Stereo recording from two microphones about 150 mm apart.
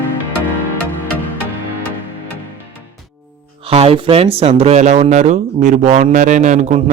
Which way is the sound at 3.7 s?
40° right (ahead or behind).